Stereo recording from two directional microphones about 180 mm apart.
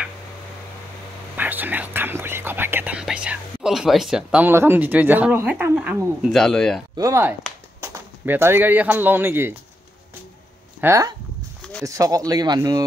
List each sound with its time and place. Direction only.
1.3 s speech: 10° right (ahead or behind)
7.0 s speech: 15° right (ahead or behind)
10.8 s speech: 15° right (ahead or behind)